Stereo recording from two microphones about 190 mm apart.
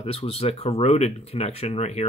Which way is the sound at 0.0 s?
30° left (ahead or behind).